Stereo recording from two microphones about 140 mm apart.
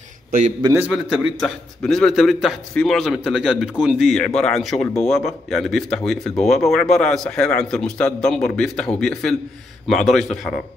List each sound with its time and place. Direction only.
0.6 s a man's voice: 35° right (ahead or behind)
0.9 s a man's voice: 5° right (ahead or behind)